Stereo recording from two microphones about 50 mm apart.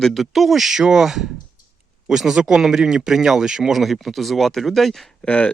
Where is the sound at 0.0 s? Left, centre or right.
Centre.